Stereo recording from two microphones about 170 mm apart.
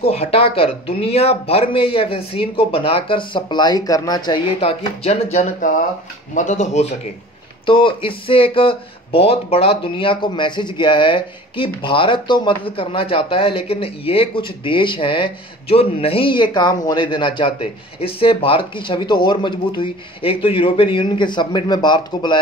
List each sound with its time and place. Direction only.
0.0 s speech: 35° left (ahead or behind)
7.6 s speech: 30° left (ahead or behind)